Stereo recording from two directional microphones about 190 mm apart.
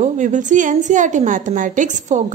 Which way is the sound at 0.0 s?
40° right (ahead or behind).